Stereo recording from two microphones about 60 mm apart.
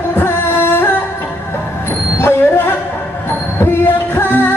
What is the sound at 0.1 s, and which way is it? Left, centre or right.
Music, left.